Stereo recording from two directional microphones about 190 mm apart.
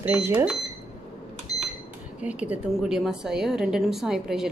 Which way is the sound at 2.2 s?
5° right (ahead or behind).